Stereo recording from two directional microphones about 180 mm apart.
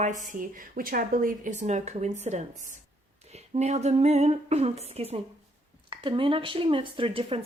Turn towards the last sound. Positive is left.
turn(degrees=-30)  # may be behind; listen again after turning